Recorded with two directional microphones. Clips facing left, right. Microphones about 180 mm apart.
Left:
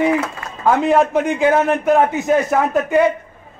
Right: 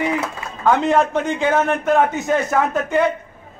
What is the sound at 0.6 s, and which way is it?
A man's voice, 5° left (ahead or behind).